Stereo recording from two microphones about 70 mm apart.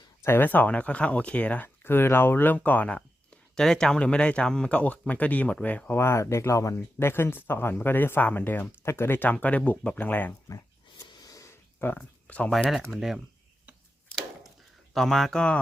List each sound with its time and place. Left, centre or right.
0.2 s speech: left; by 3.6 s centre
3.6 s speech: centre
6.0 s speech: left
7.0 s speech: left
11.0 s wheeze: left
11.9 s speech: centre
12.7 s speech: centre
14.9 s speech: centre